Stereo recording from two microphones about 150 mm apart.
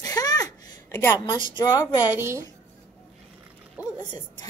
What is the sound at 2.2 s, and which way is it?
Speech, 20° right (ahead or behind).